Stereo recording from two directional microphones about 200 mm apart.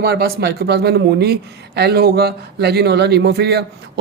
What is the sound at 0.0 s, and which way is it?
Speech, 50° right (ahead or behind).